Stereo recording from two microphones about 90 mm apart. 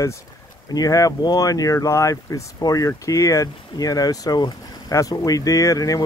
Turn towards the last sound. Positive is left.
turn(degrees=40)  # may be behind; listen again after turning